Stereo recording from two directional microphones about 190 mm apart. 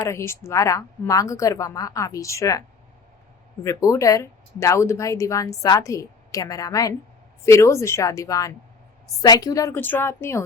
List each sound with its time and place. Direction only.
0.0 s speech: 15° left (ahead or behind)